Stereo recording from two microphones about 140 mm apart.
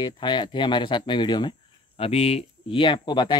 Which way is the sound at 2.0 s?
45° left (ahead or behind).